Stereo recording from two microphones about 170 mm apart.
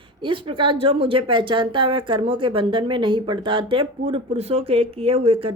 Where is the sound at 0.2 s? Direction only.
30° right (ahead or behind).